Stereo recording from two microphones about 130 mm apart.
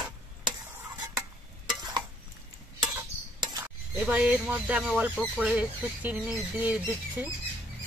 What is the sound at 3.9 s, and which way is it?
Speech, 10° right (ahead or behind).